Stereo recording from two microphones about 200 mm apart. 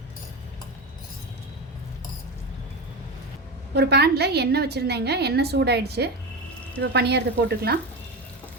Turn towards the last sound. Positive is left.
turn(degrees=-55)  # may be behind; listen again after turning